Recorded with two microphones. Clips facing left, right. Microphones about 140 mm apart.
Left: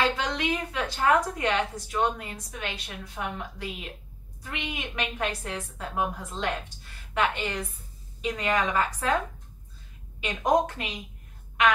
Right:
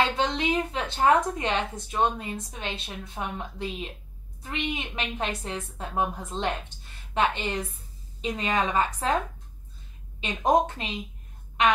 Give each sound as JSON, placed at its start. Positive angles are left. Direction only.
{"t": 0.0, "sound": "a woman's voice", "side_deg": -25}
{"t": 10.2, "sound": "a woman's voice", "side_deg": -25}